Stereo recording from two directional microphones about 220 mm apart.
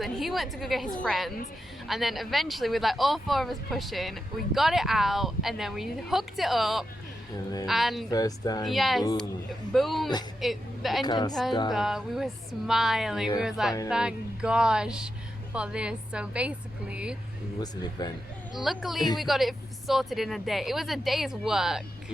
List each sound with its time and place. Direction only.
0.0 s speech: centre (ahead or behind)
8.1 s speech: 15° left (ahead or behind)
8.6 s a woman's voice: centre (ahead or behind)
11.0 s speech: 20° left (ahead or behind)
11.7 s speech: centre (ahead or behind)
18.0 s speech: 20° left (ahead or behind)
18.6 s speech: centre (ahead or behind)